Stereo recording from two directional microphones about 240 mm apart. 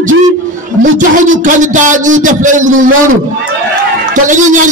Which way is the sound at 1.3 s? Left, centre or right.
Right.